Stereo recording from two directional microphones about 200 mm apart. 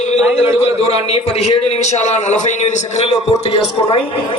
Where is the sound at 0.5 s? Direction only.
30° left (ahead or behind).